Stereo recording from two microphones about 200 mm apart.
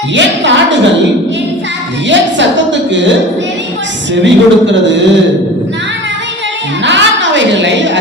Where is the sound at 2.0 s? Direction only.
65° right (ahead or behind).